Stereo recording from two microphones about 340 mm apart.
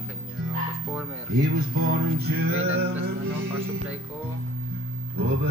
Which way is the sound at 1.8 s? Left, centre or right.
Right.